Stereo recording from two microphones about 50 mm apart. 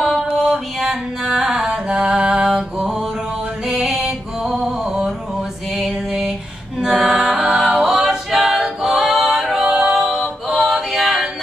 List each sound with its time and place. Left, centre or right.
0.4 s music: centre
6.8 s a capella: centre
9.4 s music: centre
9.9 s music: centre